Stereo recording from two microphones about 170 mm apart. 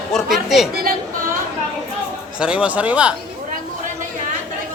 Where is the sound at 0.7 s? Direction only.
60° right (ahead or behind).